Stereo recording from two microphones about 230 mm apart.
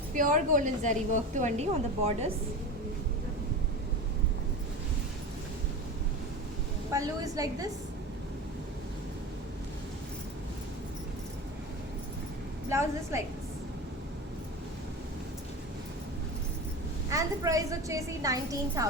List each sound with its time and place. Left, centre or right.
0.2 s a woman's voice: right
6.9 s a woman's voice: centre
12.6 s a woman's voice: centre
17.1 s a woman's voice: centre